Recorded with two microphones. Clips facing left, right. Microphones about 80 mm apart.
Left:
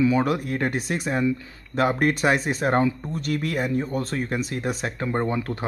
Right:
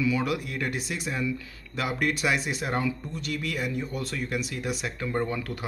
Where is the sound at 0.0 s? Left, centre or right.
Left.